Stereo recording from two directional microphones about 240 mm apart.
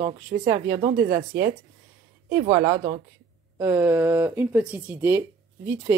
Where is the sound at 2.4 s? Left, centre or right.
Right.